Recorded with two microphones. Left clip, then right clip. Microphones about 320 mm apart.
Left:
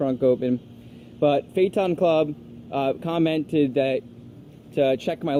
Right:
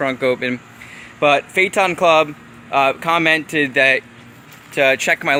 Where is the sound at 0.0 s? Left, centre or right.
Right.